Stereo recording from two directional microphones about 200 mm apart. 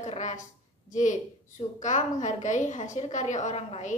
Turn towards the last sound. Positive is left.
turn(degrees=35)  # may be behind; listen again after turning